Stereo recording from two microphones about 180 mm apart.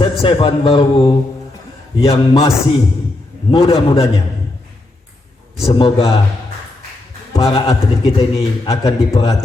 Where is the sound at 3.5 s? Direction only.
30° left (ahead or behind).